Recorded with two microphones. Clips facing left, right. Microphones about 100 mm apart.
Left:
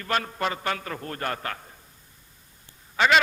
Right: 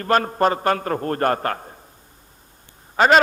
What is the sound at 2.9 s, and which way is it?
Speech, 45° right (ahead or behind).